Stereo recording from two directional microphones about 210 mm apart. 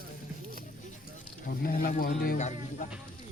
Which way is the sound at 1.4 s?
45° left (ahead or behind).